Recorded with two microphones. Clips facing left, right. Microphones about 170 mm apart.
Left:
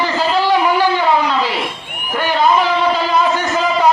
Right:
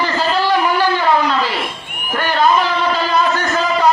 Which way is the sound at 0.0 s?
10° left (ahead or behind).